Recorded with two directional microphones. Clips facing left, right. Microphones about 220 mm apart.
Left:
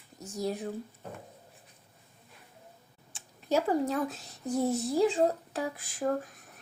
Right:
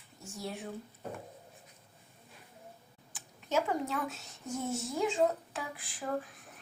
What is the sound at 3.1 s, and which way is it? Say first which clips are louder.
Speech: left 4 dB; 35° left (ahead or behind).